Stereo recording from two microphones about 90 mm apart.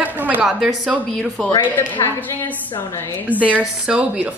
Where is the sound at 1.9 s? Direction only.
25° left (ahead or behind).